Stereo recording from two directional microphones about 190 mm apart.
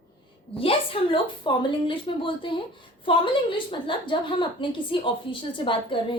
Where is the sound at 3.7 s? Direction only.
25° left (ahead or behind).